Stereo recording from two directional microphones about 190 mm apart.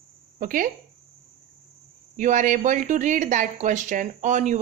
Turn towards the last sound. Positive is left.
turn(degrees=-40)  # may be behind; listen again after turning